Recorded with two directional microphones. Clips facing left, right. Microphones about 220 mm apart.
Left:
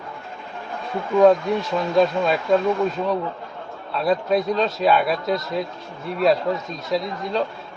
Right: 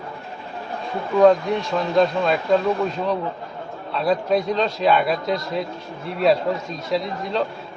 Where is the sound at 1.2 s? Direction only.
Centre (ahead or behind).